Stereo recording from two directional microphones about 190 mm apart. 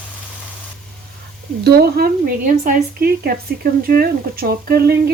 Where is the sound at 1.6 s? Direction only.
55° right (ahead or behind).